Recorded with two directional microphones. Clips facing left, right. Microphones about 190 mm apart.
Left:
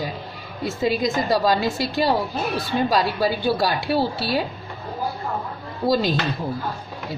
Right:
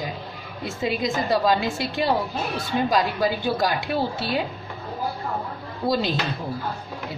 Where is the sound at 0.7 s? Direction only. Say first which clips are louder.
Left 3 dB; 40° left (ahead or behind).